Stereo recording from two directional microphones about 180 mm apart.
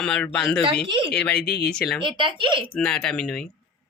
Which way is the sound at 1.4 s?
65° left (ahead or behind).